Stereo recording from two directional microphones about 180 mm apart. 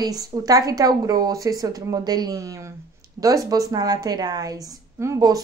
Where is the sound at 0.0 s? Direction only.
20° right (ahead or behind).